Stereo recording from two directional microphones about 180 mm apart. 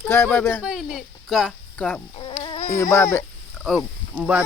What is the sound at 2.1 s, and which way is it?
Insect, 30° left (ahead or behind).